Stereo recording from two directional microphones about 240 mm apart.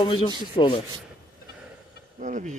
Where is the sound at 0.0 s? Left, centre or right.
Centre.